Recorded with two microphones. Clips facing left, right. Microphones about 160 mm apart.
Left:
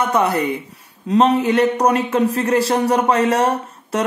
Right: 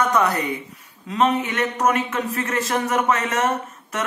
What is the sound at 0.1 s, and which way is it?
Speech, 30° left (ahead or behind).